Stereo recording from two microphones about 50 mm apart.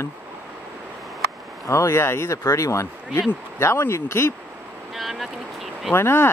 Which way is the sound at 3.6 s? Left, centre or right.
Left.